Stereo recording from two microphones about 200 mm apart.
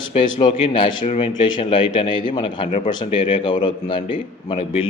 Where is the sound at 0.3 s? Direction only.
25° left (ahead or behind).